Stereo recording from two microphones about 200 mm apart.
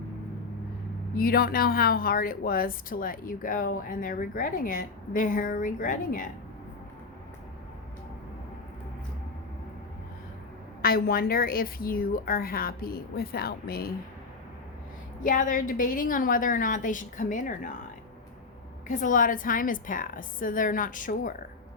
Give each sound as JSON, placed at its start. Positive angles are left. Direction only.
{"t": 1.1, "sound": "a woman's voice", "side_deg": 50}
{"t": 10.8, "sound": "a woman's voice", "side_deg": 50}
{"t": 15.2, "sound": "a woman's voice", "side_deg": 40}
{"t": 18.9, "sound": "a woman's voice", "side_deg": 40}